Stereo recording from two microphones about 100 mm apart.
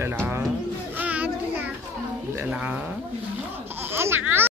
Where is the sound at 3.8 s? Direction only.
25° right (ahead or behind).